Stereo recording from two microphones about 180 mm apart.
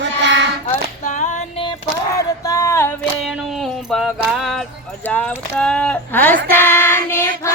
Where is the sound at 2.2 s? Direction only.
20° left (ahead or behind).